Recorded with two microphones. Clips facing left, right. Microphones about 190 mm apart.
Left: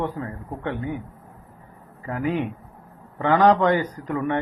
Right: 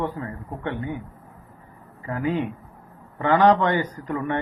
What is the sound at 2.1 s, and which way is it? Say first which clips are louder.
Speech: even; 15° left (ahead or behind).